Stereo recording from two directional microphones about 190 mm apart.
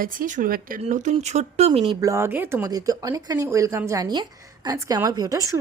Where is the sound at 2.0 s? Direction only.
15° right (ahead or behind).